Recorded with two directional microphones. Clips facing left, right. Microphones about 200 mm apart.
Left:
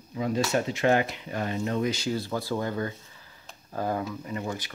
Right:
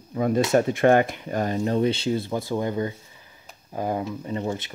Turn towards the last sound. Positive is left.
turn(degrees=-25)  # may be behind; listen again after turning